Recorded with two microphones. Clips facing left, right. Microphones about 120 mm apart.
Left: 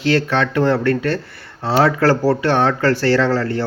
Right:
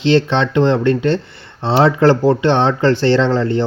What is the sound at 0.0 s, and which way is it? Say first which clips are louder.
Speech: right 3 dB; 25° right (ahead or behind).